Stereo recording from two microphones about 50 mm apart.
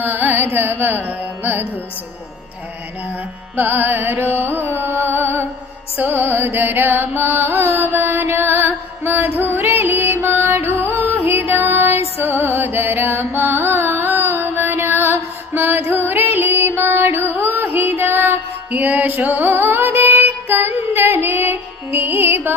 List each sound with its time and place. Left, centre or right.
0.0 s carnatic music: right
3.5 s music: right
6.0 s carnatic music: right
8.1 s music: right
18.7 s music: right
21.9 s music: right